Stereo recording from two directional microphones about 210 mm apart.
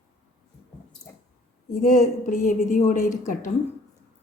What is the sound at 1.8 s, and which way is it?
A woman's voice, 35° left (ahead or behind).